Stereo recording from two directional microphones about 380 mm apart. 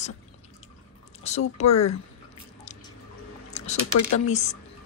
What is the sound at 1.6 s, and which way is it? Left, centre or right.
Speech, left.